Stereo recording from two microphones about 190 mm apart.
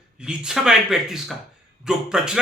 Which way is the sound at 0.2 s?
5° right (ahead or behind).